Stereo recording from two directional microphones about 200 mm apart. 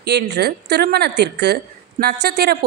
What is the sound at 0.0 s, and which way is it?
A woman's voice, 55° right (ahead or behind).